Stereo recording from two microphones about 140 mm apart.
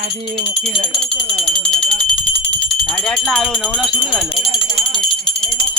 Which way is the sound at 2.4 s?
5° left (ahead or behind).